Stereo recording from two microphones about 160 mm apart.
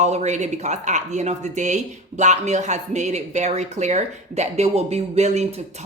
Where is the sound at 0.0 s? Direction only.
45° right (ahead or behind).